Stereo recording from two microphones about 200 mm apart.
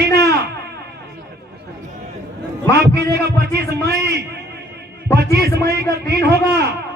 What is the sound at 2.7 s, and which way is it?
A man's voice, 55° right (ahead or behind).